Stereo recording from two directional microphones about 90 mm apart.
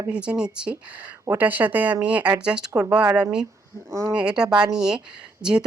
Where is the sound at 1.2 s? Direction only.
25° right (ahead or behind).